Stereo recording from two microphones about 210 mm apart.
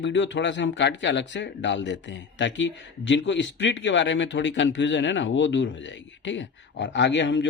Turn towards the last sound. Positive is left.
turn(degrees=60)  # may be behind; listen again after turning